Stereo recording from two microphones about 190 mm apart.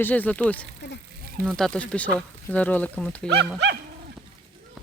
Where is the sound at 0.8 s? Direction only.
65° left (ahead or behind).